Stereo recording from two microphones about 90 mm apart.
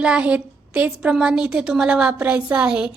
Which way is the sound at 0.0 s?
15° right (ahead or behind).